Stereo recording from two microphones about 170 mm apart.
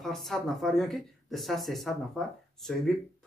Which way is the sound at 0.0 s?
Centre (ahead or behind).